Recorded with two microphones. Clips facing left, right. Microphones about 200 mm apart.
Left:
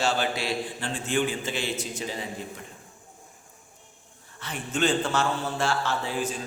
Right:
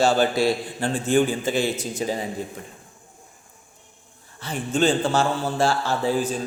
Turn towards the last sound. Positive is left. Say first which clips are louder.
# right 6 dB
turn(degrees=-35)  # may be behind; listen again after turning